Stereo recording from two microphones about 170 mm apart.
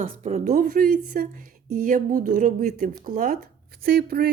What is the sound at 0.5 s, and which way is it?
Speech, 60° right (ahead or behind).